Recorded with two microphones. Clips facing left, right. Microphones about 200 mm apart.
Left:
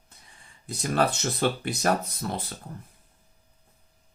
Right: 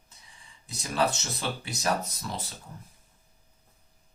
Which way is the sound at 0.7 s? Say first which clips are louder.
Left 3 dB; 55° left (ahead or behind).